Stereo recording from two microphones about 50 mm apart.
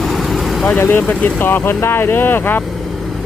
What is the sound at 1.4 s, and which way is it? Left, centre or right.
Speech, left.